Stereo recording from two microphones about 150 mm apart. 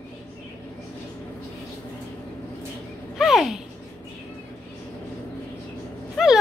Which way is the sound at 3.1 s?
Centre (ahead or behind).